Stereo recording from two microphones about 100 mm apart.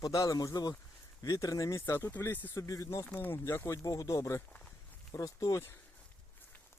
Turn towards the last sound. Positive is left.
turn(degrees=30)  # may be behind; listen again after turning